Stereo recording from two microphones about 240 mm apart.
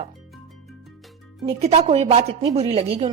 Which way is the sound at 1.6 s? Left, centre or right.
Right.